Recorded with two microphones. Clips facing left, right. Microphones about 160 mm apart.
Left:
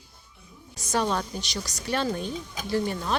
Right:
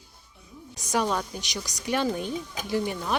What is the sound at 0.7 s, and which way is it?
Speech, 15° right (ahead or behind).